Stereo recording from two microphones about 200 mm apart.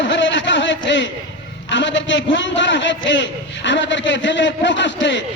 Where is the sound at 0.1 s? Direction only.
65° left (ahead or behind).